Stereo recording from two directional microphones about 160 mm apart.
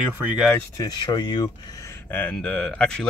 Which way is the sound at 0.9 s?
25° left (ahead or behind).